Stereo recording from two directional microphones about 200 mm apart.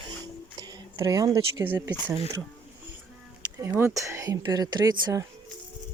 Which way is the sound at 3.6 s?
15° right (ahead or behind).